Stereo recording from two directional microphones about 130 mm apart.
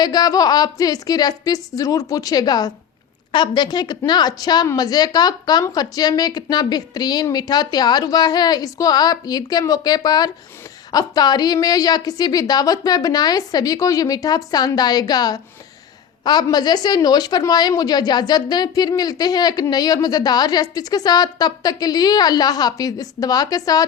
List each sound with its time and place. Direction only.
0.0 s a woman's voice: 30° left (ahead or behind)